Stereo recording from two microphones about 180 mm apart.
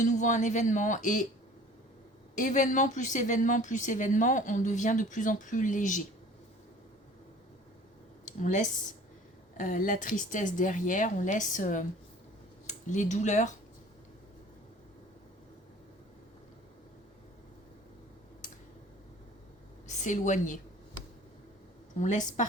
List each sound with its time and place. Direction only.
0.0 s a woman's voice: 45° left (ahead or behind)
2.3 s a woman's voice: 45° left (ahead or behind)
8.4 s a woman's voice: 45° left (ahead or behind)
18.4 s tick-tock: 45° left (ahead or behind)
19.9 s a woman's voice: 45° left (ahead or behind)
22.0 s a woman's voice: 45° left (ahead or behind)